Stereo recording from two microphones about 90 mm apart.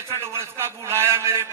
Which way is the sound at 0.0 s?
30° right (ahead or behind).